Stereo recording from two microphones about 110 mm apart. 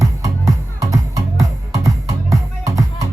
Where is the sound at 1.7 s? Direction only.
30° right (ahead or behind).